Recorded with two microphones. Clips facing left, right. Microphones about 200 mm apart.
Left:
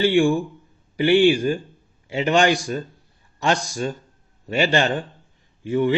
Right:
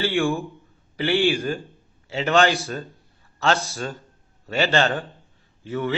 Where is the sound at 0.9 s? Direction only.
15° left (ahead or behind).